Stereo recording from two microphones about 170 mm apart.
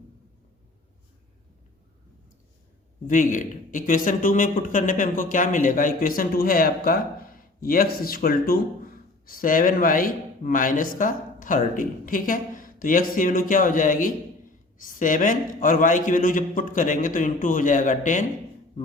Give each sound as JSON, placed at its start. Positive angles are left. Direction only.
{"t": 3.1, "sound": "a man's voice", "side_deg": 50}